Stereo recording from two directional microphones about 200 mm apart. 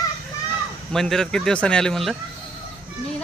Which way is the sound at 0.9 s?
Centre (ahead or behind).